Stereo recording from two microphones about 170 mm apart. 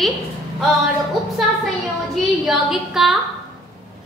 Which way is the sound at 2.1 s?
Centre (ahead or behind).